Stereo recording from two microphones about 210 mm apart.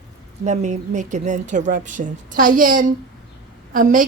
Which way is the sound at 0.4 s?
35° right (ahead or behind).